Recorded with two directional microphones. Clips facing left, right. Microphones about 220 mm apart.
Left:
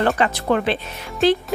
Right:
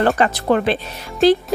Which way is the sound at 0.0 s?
35° right (ahead or behind).